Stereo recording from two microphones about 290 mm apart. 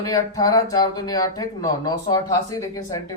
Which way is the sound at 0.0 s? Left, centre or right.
Centre.